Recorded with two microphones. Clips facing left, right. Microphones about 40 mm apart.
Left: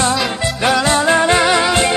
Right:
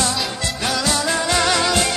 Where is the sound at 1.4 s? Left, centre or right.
Left.